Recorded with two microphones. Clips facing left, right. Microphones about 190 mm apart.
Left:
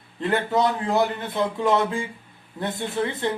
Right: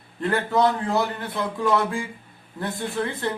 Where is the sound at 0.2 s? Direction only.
20° left (ahead or behind).